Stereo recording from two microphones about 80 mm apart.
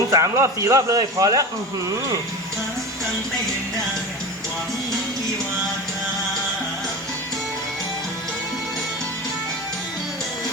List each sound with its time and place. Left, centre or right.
0.1 s a man's voice: right